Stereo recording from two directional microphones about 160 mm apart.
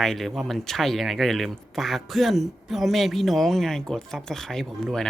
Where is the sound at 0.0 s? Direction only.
Centre (ahead or behind).